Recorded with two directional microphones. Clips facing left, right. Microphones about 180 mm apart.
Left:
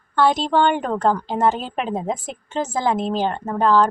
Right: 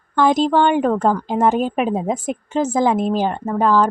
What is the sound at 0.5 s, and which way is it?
A woman's voice, 10° right (ahead or behind).